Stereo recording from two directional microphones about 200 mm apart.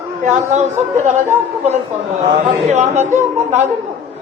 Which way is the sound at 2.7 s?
35° right (ahead or behind).